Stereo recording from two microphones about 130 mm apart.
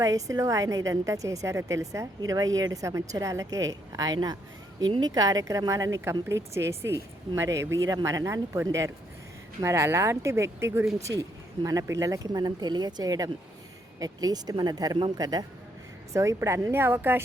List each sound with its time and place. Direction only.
0.0 s a woman's voice: 25° right (ahead or behind)